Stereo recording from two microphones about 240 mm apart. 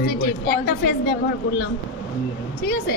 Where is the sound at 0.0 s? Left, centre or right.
Left.